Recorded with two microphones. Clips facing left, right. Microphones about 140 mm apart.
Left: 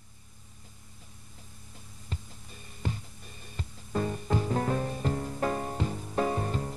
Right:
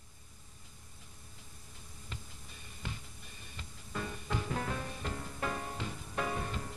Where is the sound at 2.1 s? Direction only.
35° left (ahead or behind).